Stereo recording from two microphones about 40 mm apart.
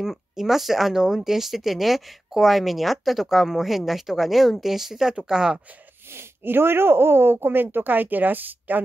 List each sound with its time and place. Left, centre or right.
0.4 s speech: centre
6.1 s speech: right